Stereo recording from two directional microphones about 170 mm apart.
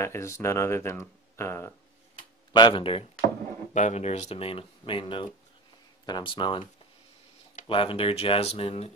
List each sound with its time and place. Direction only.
0.0 s speech: 15° left (ahead or behind)
2.5 s speech: 30° left (ahead or behind)
3.7 s speech: 45° left (ahead or behind)
7.6 s speech: 30° left (ahead or behind)